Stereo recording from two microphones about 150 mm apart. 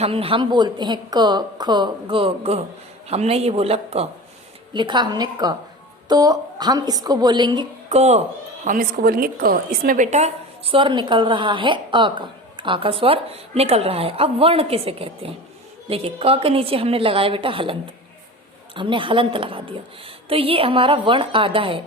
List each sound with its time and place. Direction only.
0.0 s a woman's voice: 40° right (ahead or behind)
4.7 s a woman's voice: 30° right (ahead or behind)
7.9 s speech: 45° right (ahead or behind)
8.6 s a woman's voice: 70° right (ahead or behind); by 10.8 s 50° right (ahead or behind)
10.8 s a woman's voice: 30° right (ahead or behind)